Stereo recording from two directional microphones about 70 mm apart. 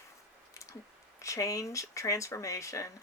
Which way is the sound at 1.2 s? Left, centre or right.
Left.